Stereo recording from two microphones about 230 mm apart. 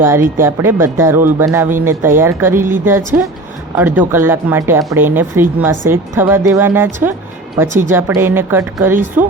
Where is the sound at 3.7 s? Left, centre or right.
Centre.